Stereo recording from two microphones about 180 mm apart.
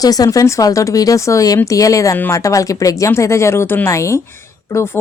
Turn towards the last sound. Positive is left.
turn(degrees=15)  # may be behind; listen again after turning